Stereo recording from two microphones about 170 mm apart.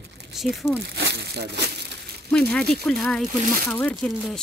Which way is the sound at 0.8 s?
80° right.